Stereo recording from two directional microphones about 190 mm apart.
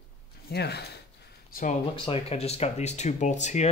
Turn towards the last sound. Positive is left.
turn(degrees=35)  # may be behind; listen again after turning